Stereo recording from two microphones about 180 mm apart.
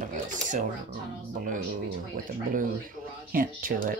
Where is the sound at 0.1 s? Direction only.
45° right (ahead or behind).